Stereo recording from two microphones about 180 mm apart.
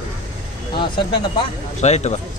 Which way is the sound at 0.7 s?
25° left (ahead or behind).